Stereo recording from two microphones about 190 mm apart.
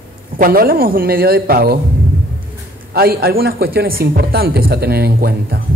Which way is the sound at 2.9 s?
55° right (ahead or behind).